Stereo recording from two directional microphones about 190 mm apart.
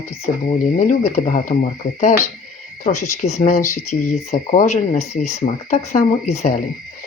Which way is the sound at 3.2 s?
35° left (ahead or behind).